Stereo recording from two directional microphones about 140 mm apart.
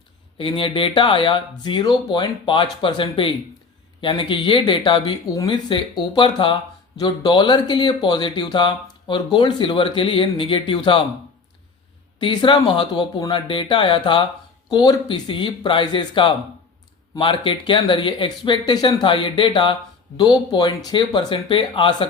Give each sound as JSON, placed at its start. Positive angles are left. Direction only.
{"t": 0.3, "sound": "speech", "side_deg": 40}
{"t": 12.2, "sound": "speech", "side_deg": 35}